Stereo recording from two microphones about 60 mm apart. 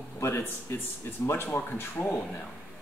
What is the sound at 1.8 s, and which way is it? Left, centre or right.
Speech, left.